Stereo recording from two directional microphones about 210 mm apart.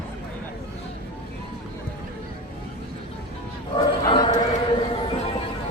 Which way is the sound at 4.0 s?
20° left (ahead or behind).